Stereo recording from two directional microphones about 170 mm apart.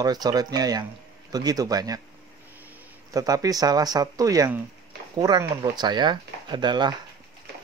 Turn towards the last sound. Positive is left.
turn(degrees=-25)  # may be behind; listen again after turning